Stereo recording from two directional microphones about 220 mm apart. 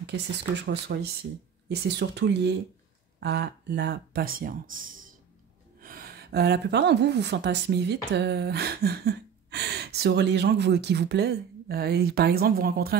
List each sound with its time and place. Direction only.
0.7 s a woman's voice: 50° right (ahead or behind)